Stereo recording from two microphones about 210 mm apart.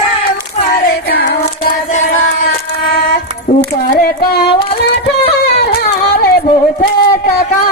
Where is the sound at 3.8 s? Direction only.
45° left (ahead or behind).